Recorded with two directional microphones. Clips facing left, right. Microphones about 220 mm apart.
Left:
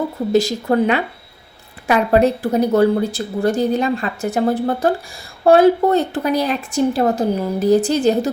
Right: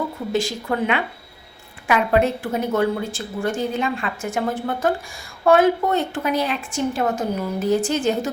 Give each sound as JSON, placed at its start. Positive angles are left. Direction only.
{"t": 0.3, "sound": "a woman's voice", "side_deg": 40}